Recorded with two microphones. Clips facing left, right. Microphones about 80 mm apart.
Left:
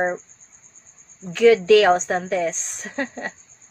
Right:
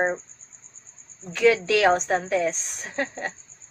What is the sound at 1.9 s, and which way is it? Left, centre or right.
A woman's voice, left.